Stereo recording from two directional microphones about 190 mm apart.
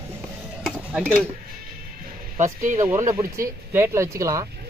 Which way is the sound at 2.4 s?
40° right (ahead or behind).